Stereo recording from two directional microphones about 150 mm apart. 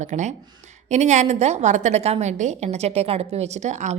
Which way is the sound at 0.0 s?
50° right (ahead or behind).